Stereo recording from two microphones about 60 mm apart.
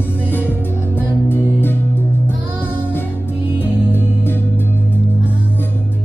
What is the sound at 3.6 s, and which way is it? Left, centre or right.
Music, left.